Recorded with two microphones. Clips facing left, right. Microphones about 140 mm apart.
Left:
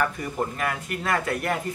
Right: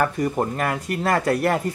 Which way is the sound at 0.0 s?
40° right (ahead or behind).